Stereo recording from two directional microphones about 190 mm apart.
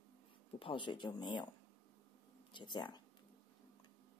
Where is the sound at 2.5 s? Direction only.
25° left (ahead or behind).